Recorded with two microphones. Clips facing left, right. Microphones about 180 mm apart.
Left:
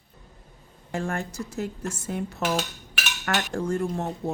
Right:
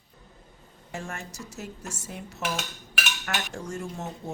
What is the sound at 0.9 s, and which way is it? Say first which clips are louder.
Speech: left 8 dB; 55° left (ahead or behind).